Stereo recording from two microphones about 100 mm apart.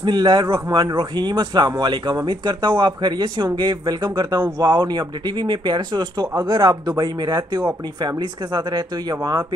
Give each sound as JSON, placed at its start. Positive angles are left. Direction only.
{"t": 0.0, "sound": "speech", "side_deg": -50}
{"t": 0.9, "sound": "speech", "side_deg": -50}
{"t": 6.3, "sound": "speech", "side_deg": -30}